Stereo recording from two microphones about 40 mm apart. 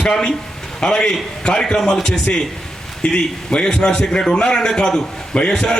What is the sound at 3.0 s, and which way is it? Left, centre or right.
A man's voice, left.